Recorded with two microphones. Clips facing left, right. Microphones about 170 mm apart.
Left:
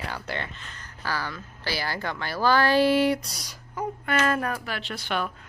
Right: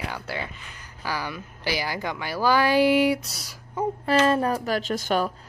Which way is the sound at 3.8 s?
30° right (ahead or behind).